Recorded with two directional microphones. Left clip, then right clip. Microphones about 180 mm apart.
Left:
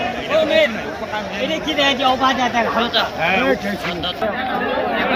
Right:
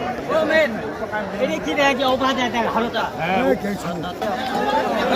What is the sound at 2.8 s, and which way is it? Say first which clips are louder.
Speech: left 4 dB; 70° right (ahead or behind).